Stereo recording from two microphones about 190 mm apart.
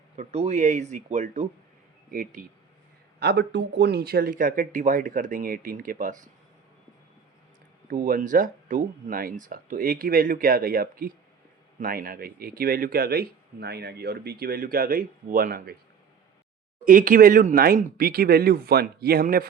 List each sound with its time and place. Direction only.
0.2 s speech: 35° right (ahead or behind)
3.2 s speech: 60° right (ahead or behind); by 6.1 s 45° right (ahead or behind)
7.9 s speech: 45° right (ahead or behind)
16.8 s speech: 45° right (ahead or behind)